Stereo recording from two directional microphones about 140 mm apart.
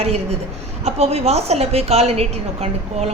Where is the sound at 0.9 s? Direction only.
45° right (ahead or behind).